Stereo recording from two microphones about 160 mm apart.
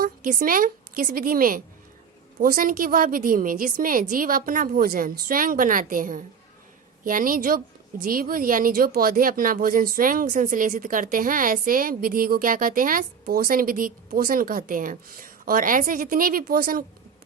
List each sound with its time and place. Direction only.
0.0 s a woman's voice: 60° right (ahead or behind)